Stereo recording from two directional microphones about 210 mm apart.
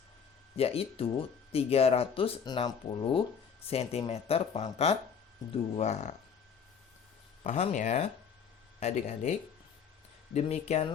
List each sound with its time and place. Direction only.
0.5 s speech: 30° left (ahead or behind)
7.4 s speech: 35° left (ahead or behind)